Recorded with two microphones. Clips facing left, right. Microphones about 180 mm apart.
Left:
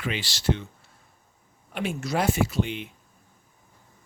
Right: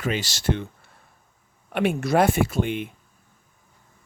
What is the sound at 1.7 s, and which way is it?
Speech, 60° right (ahead or behind).